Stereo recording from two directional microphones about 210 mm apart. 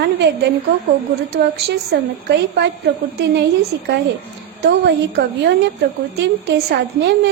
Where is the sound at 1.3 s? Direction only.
50° right (ahead or behind).